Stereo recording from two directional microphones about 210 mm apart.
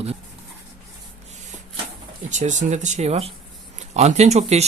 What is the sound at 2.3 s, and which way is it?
Speech, 35° right (ahead or behind).